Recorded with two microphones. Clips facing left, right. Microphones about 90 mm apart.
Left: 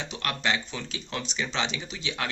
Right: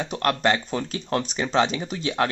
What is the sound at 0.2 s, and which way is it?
Speech, 45° right (ahead or behind).